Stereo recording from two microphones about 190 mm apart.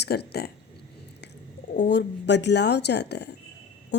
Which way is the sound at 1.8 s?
65° left (ahead or behind).